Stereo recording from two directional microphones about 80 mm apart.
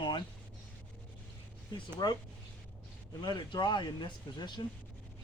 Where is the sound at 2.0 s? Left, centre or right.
Left.